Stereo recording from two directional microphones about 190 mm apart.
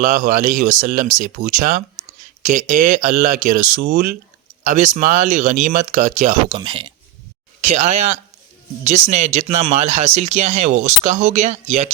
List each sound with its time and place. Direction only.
0.0 s speech: 45° right (ahead or behind)
3.8 s speech: 60° right (ahead or behind)
4.6 s speech: 45° right (ahead or behind)
6.6 s speech: 25° right (ahead or behind)
7.7 s speech: 35° right (ahead or behind)